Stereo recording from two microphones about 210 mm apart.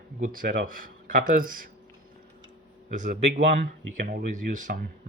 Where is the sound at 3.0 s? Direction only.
35° right (ahead or behind).